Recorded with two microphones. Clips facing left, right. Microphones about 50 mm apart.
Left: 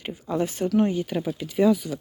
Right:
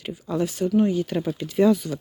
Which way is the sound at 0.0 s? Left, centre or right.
Left.